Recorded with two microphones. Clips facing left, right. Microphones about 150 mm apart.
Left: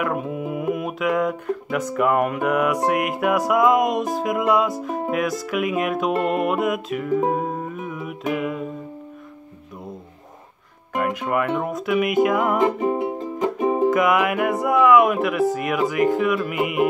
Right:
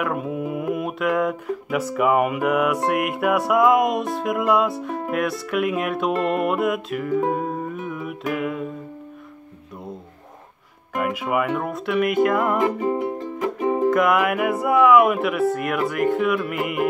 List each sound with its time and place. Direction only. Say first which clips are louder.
0.0 s music: even; centre (ahead or behind)
11.0 s music: even; 5° right (ahead or behind)
12.5 s music: left 1 dB; 20° left (ahead or behind)
13.8 s music: right 1 dB; centre (ahead or behind)